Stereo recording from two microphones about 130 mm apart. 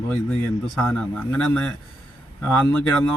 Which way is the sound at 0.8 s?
10° left (ahead or behind).